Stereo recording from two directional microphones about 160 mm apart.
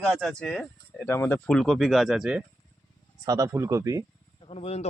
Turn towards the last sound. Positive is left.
turn(degrees=40)  # may be behind; listen again after turning